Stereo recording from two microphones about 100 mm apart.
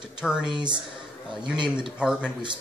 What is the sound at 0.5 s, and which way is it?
Speech, 50° right (ahead or behind).